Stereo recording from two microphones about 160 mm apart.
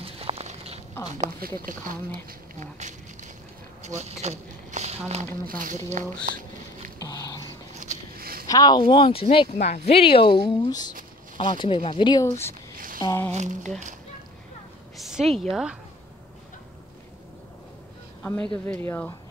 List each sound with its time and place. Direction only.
0.2 s a sound: 40° right (ahead or behind)
1.4 s speech: 65° right (ahead or behind)
2.6 s speech: 50° right (ahead or behind)
5.5 s speech: 55° right (ahead or behind)
7.0 s a sound: 20° left (ahead or behind)
7.8 s biting: 60° right (ahead or behind)
8.5 s speech: 25° left (ahead or behind)
10.4 s speech: 25° left (ahead or behind)
12.7 s a sound: 60° right (ahead or behind)
13.0 s speech: 20° left (ahead or behind)
13.3 s speech: 50° right (ahead or behind)
15.0 s speech: centre (ahead or behind)
18.5 s speech: 5° left (ahead or behind)